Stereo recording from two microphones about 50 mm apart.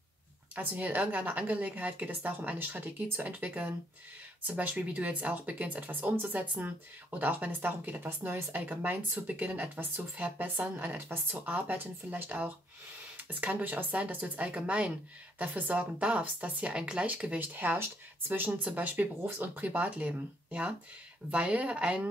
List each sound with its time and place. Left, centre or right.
0.6 s a woman's voice: right
10.3 s a woman's voice: right
11.4 s a woman's voice: right
16.7 s a woman's voice: centre; by 18.6 s right
18.6 s a woman's voice: right
20.1 s speech: right